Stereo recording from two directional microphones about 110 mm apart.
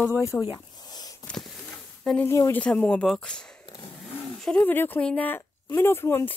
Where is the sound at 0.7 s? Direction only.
40° left (ahead or behind).